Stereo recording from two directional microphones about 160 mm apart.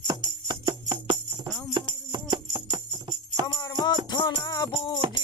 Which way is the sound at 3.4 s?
25° left (ahead or behind).